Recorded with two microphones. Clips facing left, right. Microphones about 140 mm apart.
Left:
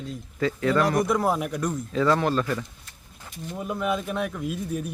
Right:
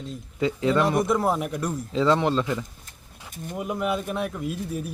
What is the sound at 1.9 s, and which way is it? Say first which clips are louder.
Speech: right 1 dB; 20° right (ahead or behind).